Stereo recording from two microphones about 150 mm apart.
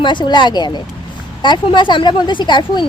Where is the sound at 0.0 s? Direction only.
30° left (ahead or behind).